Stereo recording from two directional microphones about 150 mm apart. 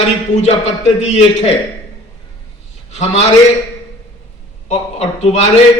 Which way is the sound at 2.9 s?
50° left (ahead or behind).